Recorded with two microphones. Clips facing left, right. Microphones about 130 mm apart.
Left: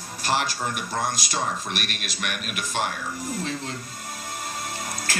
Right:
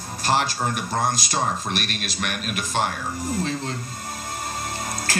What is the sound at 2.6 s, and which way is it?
Speech, 35° right (ahead or behind).